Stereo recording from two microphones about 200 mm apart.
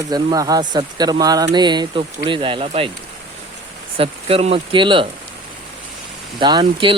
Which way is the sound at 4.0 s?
30° right (ahead or behind).